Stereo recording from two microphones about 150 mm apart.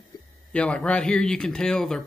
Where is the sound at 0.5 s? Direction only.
5° left (ahead or behind).